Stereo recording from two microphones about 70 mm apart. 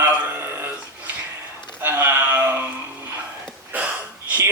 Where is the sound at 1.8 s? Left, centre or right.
Right.